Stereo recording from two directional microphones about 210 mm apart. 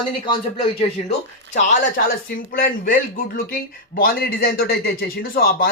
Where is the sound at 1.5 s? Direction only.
35° left (ahead or behind).